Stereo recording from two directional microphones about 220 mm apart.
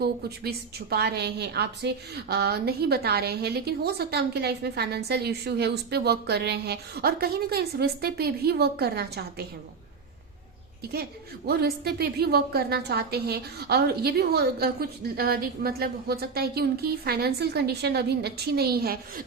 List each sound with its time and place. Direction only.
0.0 s a woman's voice: 45° right (ahead or behind)
11.4 s a woman's voice: 45° right (ahead or behind)